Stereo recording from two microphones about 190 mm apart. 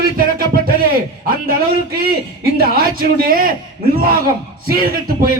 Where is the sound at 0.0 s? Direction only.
50° right (ahead or behind).